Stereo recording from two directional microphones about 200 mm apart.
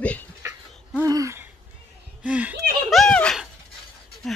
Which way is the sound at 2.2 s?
5° right (ahead or behind).